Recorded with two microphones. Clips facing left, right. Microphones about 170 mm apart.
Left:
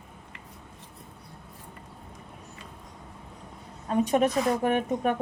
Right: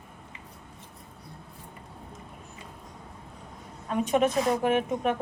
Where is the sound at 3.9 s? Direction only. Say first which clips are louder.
Left 1 dB; 40° left (ahead or behind).